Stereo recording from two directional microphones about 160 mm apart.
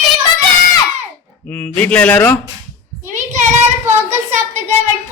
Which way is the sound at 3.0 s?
50° right (ahead or behind).